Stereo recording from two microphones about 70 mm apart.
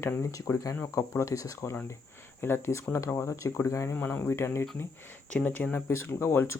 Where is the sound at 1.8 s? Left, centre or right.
Left.